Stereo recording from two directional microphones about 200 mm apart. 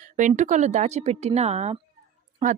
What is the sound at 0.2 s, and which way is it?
Speech, 40° right (ahead or behind).